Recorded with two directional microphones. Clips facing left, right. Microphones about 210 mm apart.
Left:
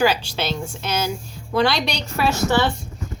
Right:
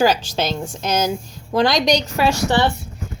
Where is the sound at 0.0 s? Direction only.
40° right (ahead or behind).